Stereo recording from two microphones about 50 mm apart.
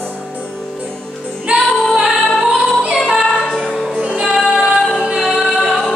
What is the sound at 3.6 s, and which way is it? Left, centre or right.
Music, centre.